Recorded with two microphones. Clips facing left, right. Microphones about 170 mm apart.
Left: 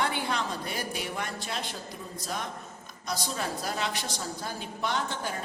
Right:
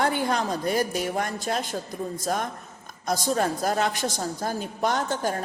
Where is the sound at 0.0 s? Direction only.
45° right (ahead or behind).